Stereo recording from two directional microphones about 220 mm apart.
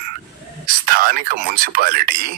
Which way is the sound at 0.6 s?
40° right (ahead or behind).